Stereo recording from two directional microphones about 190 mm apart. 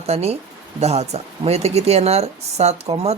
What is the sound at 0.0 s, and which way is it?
Speech, 35° right (ahead or behind).